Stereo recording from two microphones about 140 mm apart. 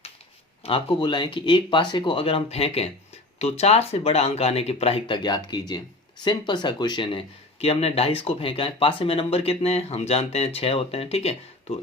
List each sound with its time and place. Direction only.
0.6 s speech: 40° left (ahead or behind)